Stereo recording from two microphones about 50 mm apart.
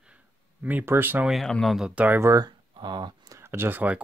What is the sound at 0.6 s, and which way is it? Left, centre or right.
Speech, right.